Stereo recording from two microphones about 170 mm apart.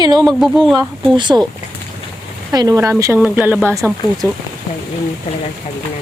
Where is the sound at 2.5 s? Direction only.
20° right (ahead or behind).